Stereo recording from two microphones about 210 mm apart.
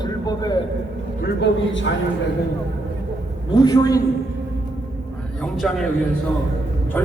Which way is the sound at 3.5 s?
20° left (ahead or behind).